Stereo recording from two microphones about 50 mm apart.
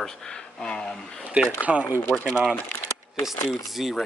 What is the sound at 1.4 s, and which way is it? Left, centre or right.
Speech, right.